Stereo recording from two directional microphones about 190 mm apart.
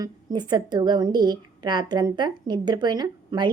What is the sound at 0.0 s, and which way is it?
A woman's voice, 20° right (ahead or behind).